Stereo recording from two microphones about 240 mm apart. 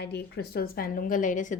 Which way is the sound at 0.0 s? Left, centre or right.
Left.